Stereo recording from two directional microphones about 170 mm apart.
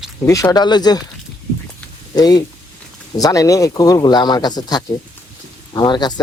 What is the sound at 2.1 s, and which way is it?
Speech, 25° left (ahead or behind).